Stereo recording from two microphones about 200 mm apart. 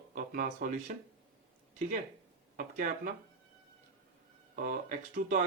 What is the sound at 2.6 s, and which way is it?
Speech, 45° right (ahead or behind).